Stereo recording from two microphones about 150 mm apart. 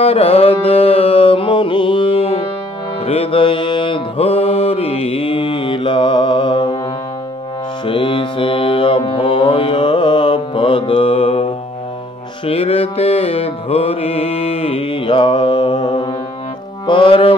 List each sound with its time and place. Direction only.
0.0 s music: 40° left (ahead or behind)
3.1 s mantra: 40° left (ahead or behind)
7.8 s mantra: 35° left (ahead or behind)
12.4 s music: 40° left (ahead or behind)